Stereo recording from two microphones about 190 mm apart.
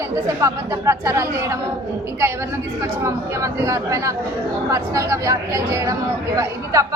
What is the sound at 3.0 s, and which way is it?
A woman's voice, 15° right (ahead or behind).